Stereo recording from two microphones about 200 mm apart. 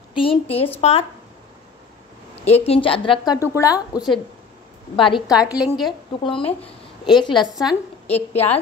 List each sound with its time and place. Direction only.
0.1 s a woman's voice: 25° left (ahead or behind)
2.4 s a woman's voice: 30° left (ahead or behind)
5.3 s a woman's voice: 5° right (ahead or behind)
7.2 s a woman's voice: 25° left (ahead or behind)
7.5 s a woman's voice: centre (ahead or behind)
8.3 s a woman's voice: 30° left (ahead or behind)